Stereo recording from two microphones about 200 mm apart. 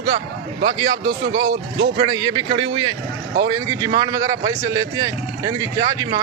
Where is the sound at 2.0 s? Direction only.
20° right (ahead or behind).